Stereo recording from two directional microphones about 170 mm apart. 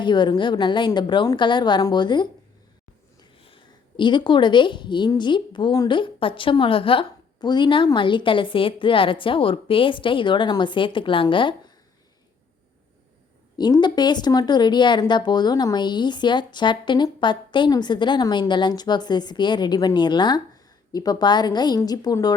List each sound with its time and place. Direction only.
0.0 s speech: 25° left (ahead or behind)
13.6 s speech: 25° left (ahead or behind)